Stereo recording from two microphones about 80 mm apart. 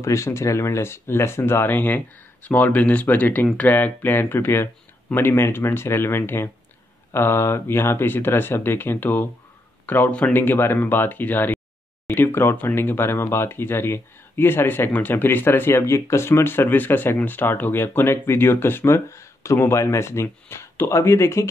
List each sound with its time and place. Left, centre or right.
0.0 s speech: left